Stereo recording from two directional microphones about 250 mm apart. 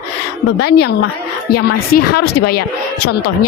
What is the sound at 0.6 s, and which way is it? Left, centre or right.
A woman's voice, left.